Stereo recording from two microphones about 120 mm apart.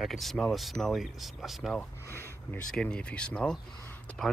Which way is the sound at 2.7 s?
5° left (ahead or behind).